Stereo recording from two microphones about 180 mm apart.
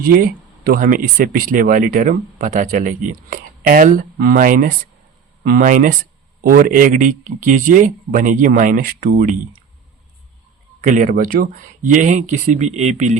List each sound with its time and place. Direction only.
0.0 s speech: 55° right (ahead or behind)
10.8 s speech: 45° right (ahead or behind)